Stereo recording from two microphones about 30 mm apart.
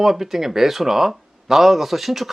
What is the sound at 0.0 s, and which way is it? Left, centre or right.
Speech, centre.